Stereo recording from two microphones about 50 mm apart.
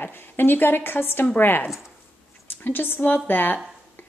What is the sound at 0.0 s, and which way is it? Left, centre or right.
A woman's voice, left.